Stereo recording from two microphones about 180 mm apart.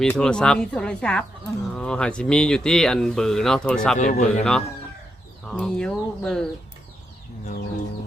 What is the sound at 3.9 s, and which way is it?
Speech, 40° left (ahead or behind).